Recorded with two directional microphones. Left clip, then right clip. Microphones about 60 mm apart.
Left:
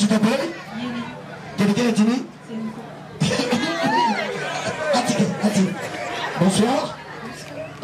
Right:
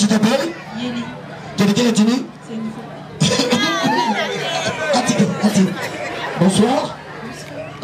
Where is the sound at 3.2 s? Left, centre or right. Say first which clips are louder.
Right 5 dB; right.